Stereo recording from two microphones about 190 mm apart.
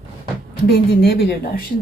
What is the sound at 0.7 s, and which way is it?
Speech, 55° left (ahead or behind).